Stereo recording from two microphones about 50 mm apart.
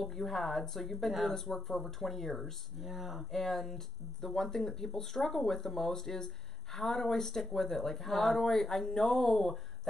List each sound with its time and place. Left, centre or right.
0.0 s speech: centre